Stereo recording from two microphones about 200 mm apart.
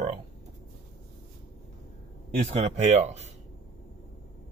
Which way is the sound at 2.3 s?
35° right (ahead or behind).